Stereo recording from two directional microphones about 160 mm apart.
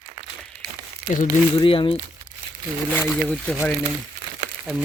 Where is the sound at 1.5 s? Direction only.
35° left (ahead or behind).